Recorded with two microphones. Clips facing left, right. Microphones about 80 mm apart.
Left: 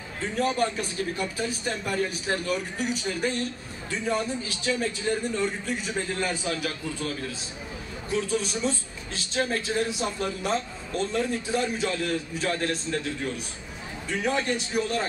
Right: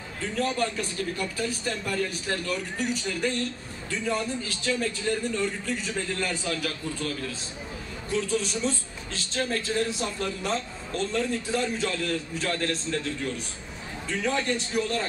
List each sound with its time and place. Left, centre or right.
0.2 s a man's voice: left